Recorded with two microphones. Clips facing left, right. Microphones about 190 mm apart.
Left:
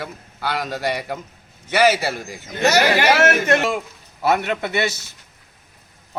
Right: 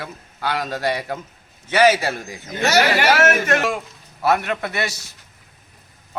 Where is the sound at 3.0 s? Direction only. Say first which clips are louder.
Left 1 dB; 20° left (ahead or behind).